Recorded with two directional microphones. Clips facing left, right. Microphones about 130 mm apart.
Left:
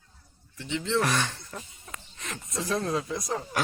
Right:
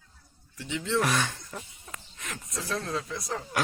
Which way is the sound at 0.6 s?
10° right (ahead or behind).